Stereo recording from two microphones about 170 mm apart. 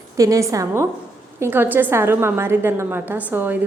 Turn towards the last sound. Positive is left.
turn(degrees=-10)  # may be behind; listen again after turning